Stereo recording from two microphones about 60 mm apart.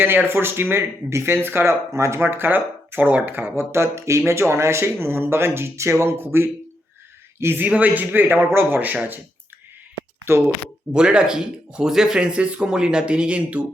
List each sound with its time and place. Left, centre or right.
0.3 s speech: right
1.9 s speech: right
6.1 s speech: right
7.6 s speech: right
8.8 s speech: right
10.3 s speech: right
10.9 s speech: centre